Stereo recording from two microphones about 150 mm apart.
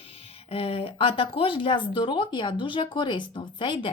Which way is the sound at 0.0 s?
40° left (ahead or behind).